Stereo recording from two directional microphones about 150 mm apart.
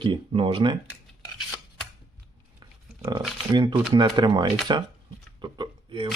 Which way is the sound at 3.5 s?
30° right (ahead or behind).